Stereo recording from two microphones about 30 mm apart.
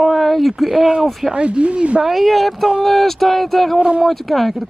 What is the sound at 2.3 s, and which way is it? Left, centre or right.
Speech, centre.